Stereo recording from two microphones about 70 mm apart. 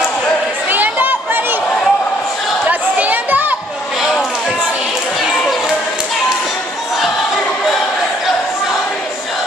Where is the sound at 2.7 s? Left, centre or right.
Right.